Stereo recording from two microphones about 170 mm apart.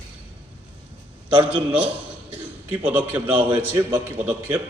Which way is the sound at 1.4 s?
10° right (ahead or behind).